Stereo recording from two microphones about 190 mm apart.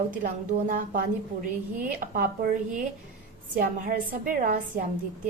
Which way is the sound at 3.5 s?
45° right (ahead or behind).